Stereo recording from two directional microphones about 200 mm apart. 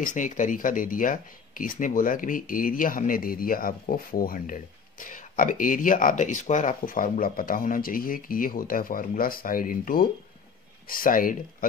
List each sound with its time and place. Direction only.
0.0 s speech: 40° left (ahead or behind)